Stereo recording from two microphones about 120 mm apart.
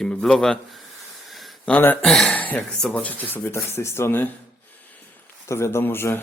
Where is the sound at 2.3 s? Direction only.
15° left (ahead or behind).